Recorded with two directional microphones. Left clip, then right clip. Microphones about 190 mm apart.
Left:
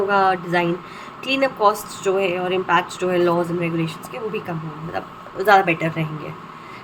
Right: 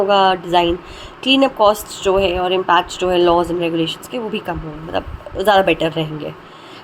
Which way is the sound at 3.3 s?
35° right (ahead or behind).